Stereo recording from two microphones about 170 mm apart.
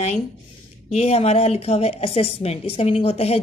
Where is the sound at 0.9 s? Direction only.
35° left (ahead or behind).